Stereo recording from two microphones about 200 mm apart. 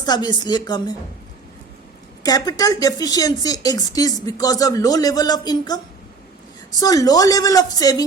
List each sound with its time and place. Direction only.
0.0 s a woman's voice: 20° left (ahead or behind)
2.2 s speech: 20° left (ahead or behind)